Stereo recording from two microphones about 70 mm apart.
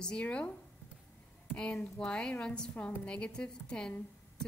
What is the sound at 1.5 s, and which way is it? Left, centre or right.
A woman's voice, centre.